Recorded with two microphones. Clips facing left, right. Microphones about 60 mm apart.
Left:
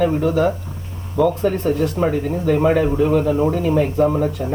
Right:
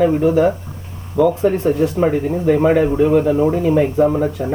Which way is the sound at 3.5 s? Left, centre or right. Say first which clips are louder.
Right 3 dB; right.